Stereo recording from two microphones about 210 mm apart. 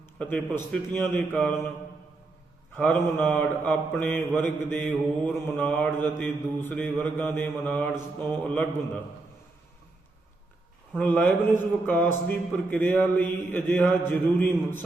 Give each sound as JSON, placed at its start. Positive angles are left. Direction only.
{"t": 0.2, "sound": "mantra", "side_deg": 5}
{"t": 2.7, "sound": "mantra", "side_deg": 10}
{"t": 10.9, "sound": "mantra", "side_deg": 10}